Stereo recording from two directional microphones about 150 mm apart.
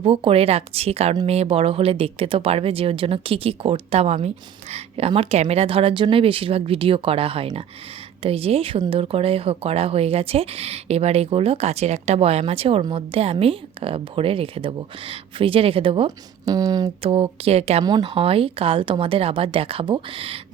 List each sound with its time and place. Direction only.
0.0 s speech: 40° right (ahead or behind)
16.5 s speech: 25° right (ahead or behind)